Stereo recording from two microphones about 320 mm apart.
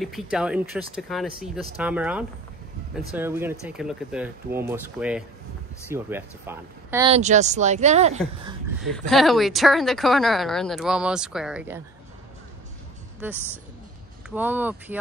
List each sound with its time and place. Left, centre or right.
0.0 s speech: centre
7.1 s speech: right
8.8 s speech: centre
14.3 s speech: centre